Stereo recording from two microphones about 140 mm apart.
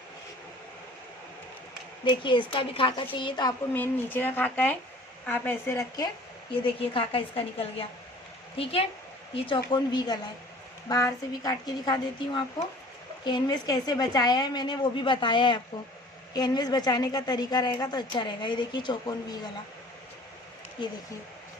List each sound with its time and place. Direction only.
2.0 s a woman's voice: 35° left (ahead or behind)
3.8 s speech: 15° left (ahead or behind)
6.5 s a woman's voice: 40° left (ahead or behind)